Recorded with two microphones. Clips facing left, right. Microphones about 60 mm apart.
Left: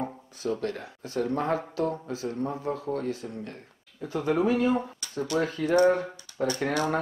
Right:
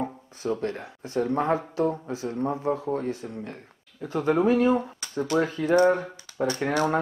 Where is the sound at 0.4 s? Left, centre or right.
Right.